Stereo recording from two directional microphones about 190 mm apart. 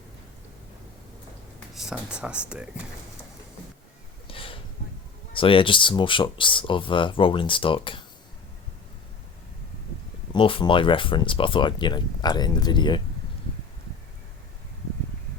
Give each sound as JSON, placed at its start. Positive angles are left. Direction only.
{"t": 1.7, "sound": "speech", "side_deg": 0}
{"t": 4.3, "sound": "a sound", "side_deg": 30}
{"t": 5.3, "sound": "speech", "side_deg": 25}
{"t": 10.3, "sound": "speech", "side_deg": 25}